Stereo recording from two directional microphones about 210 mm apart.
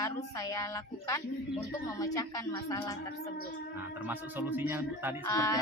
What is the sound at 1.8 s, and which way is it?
Music, 15° left (ahead or behind).